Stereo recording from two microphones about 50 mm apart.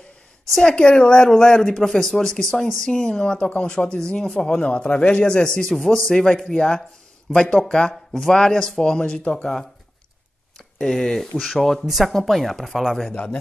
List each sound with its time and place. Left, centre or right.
0.5 s speech: centre
5.7 s speech: centre
7.9 s speech: centre
10.8 s speech: centre
13.1 s a man's voice: left